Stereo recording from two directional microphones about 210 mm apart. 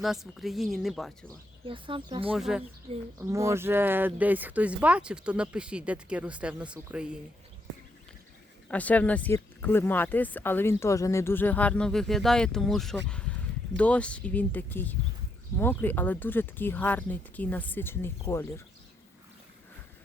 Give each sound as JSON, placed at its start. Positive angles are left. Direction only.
{"t": 0.0, "sound": "speech", "side_deg": 0}
{"t": 1.6, "sound": "speech", "side_deg": -25}
{"t": 2.3, "sound": "speech", "side_deg": 0}
{"t": 3.2, "sound": "speech", "side_deg": -15}
{"t": 8.7, "sound": "speech", "side_deg": 5}
{"t": 13.1, "sound": "a sound", "side_deg": 5}
{"t": 13.7, "sound": "speech", "side_deg": 5}